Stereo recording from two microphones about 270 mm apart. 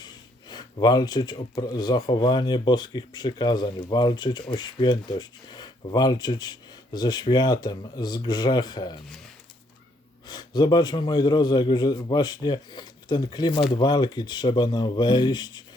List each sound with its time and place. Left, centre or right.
0.0 s speech: centre
10.2 s speech: centre